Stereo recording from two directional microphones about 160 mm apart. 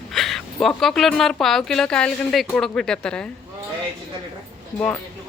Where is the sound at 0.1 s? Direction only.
Centre (ahead or behind).